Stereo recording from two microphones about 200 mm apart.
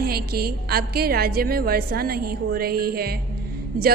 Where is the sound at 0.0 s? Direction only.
50° right (ahead or behind).